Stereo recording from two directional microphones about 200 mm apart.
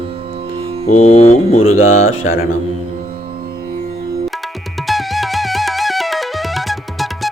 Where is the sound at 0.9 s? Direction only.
35° left (ahead or behind).